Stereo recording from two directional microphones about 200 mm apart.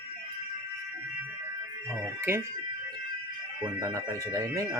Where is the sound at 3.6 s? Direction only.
15° right (ahead or behind).